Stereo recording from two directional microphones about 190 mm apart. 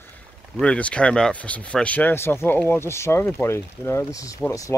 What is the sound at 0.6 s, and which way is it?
Speech, 5° left (ahead or behind).